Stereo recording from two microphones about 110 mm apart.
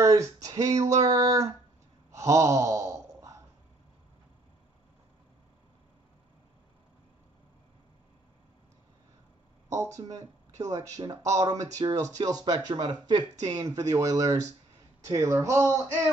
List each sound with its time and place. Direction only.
0.0 s speech: 30° right (ahead or behind)
2.1 s a sound: 30° right (ahead or behind)
9.7 s speech: 30° right (ahead or behind)